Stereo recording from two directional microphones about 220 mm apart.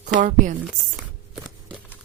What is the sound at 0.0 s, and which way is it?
Speech, 35° right (ahead or behind).